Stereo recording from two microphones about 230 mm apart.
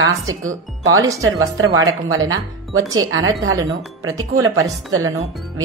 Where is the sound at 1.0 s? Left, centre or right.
Centre.